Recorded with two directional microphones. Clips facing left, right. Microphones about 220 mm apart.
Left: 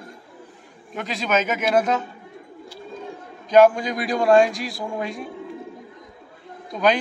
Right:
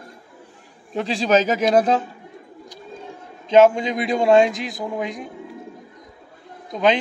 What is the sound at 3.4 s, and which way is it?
A man's voice, 25° right (ahead or behind).